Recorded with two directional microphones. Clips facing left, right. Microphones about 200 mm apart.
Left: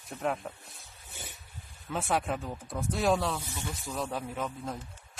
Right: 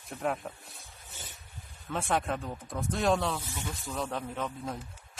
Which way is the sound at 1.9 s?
Centre (ahead or behind).